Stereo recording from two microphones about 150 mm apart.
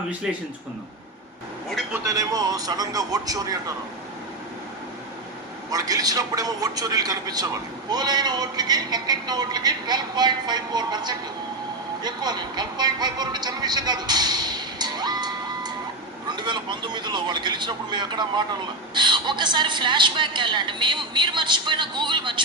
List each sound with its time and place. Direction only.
2.0 s a man's voice: 25° right (ahead or behind)
5.7 s a man's voice: 25° right (ahead or behind)